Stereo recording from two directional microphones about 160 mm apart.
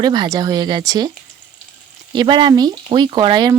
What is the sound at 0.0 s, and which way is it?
Speech, 25° right (ahead or behind).